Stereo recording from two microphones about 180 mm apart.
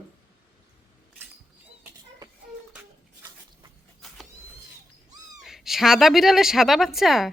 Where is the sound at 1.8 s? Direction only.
20° right (ahead or behind).